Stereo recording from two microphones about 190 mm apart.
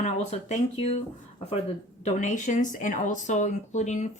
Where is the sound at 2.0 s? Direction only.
40° left (ahead or behind).